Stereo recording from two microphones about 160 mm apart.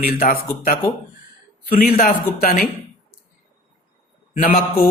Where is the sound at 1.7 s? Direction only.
65° left (ahead or behind).